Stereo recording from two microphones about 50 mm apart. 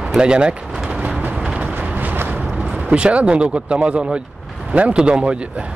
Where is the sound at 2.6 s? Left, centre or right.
Centre.